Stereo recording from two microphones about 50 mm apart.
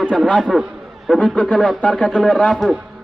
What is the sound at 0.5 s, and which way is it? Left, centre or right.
Speech, centre.